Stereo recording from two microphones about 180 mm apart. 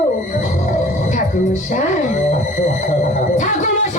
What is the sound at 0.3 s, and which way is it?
Music, 45° left (ahead or behind).